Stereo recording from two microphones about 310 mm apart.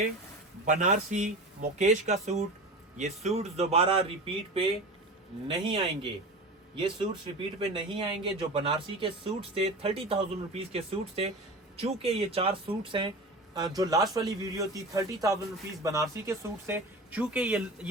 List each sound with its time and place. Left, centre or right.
0.6 s speech: right
5.5 s speech: centre